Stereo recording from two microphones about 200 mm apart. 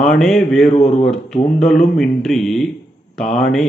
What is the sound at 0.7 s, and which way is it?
Speech, 35° left (ahead or behind).